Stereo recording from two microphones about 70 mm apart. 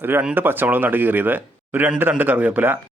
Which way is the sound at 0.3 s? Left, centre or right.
Right.